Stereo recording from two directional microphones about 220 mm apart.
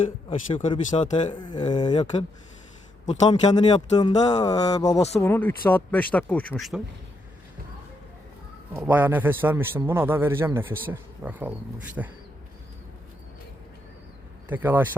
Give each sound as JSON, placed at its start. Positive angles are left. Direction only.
{"t": 0.5, "sound": "speech", "side_deg": 25}
{"t": 3.1, "sound": "speech", "side_deg": 25}
{"t": 8.7, "sound": "a man's voice", "side_deg": -10}
{"t": 14.4, "sound": "speech", "side_deg": -10}